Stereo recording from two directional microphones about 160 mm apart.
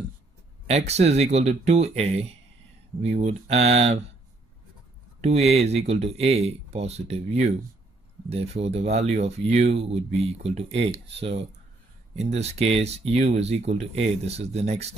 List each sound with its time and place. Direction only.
0.7 s speech: 40° right (ahead or behind)
5.2 s speech: 40° right (ahead or behind)